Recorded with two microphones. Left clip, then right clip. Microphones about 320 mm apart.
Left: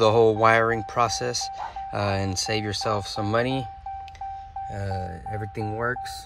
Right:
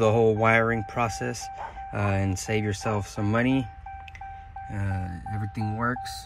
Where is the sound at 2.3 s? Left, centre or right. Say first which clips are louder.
Left 2 dB; left.